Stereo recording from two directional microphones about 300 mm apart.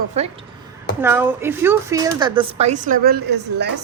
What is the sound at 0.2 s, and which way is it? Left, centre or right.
Speech, right.